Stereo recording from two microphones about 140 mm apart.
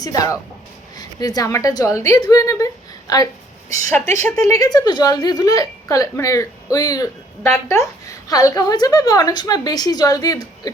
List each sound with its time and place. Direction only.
0.0 s speech: 25° left (ahead or behind)
4.1 s speech: 20° left (ahead or behind)